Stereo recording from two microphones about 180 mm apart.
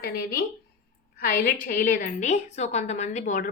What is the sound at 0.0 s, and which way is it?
A woman's voice, 60° left (ahead or behind).